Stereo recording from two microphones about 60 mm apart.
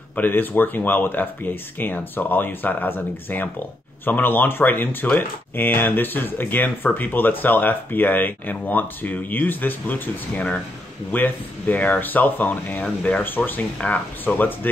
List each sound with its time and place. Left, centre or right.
0.1 s speech: left
14.2 s speech: left